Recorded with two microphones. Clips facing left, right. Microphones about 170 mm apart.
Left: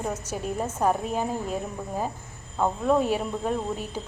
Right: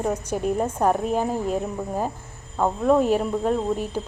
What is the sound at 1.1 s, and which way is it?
Speech, 45° right (ahead or behind).